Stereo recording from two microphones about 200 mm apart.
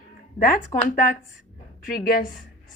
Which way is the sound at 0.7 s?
15° left (ahead or behind).